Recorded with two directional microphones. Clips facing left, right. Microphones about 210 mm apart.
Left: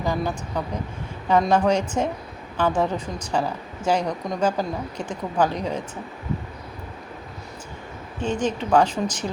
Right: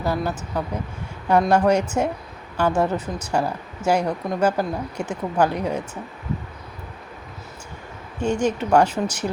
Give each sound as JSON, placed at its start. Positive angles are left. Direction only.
{"t": 0.0, "sound": "speech", "side_deg": -5}
{"t": 8.2, "sound": "speech", "side_deg": -10}